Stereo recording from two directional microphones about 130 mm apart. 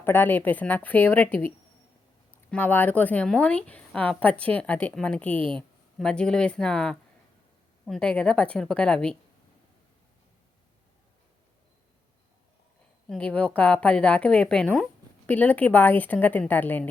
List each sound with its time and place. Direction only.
0.0 s speech: 15° left (ahead or behind)
13.1 s speech: 10° left (ahead or behind)